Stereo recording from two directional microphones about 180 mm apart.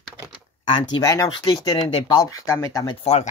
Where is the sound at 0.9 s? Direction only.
15° left (ahead or behind).